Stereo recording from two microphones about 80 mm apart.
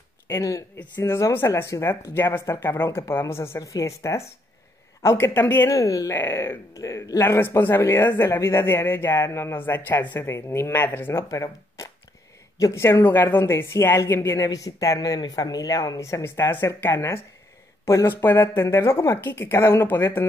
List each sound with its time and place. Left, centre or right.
0.3 s speech: left
0.7 s speech: left
5.7 s speech: left
7.2 s speech: left
9.5 s speech: left
11.2 s speech: left
12.7 s speech: left
14.4 s speech: left
15.0 s speech: left